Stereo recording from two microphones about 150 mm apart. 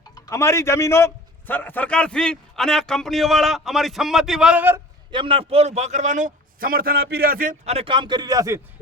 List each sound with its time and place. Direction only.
0.1 s a man's voice: 20° left (ahead or behind); by 4.8 s 10° right (ahead or behind)
5.1 s a man's voice: 35° right (ahead or behind); by 7.5 s 70° right (ahead or behind)
7.6 s speech: 45° right (ahead or behind); by 8.6 s 20° right (ahead or behind)